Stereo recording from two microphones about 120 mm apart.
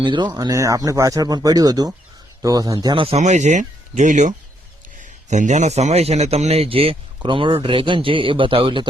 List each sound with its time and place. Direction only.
0.0 s speech: 40° right (ahead or behind)
3.0 s speech: 55° right (ahead or behind)
3.2 s speech: 80° right; by 8.9 s 45° right (ahead or behind)